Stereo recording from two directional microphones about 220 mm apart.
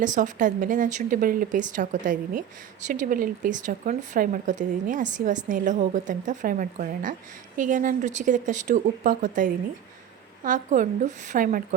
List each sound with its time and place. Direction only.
0.0 s speech: 35° right (ahead or behind)